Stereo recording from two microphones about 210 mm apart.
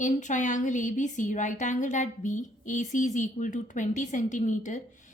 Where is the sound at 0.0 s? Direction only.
35° left (ahead or behind).